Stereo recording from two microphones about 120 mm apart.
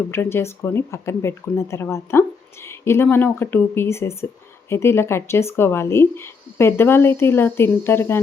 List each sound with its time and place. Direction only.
0.1 s speech: 20° left (ahead or behind)